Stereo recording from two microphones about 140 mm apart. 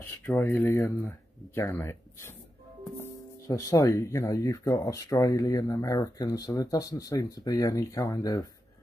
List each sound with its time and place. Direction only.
0.2 s speech: 15° left (ahead or behind)
3.4 s speech: 25° left (ahead or behind)